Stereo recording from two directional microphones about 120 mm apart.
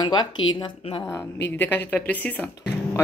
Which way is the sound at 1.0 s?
20° left (ahead or behind).